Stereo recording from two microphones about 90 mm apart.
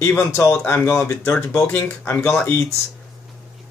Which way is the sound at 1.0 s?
15° left (ahead or behind).